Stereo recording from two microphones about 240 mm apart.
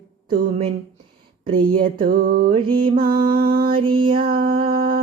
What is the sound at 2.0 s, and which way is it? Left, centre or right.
Music, right.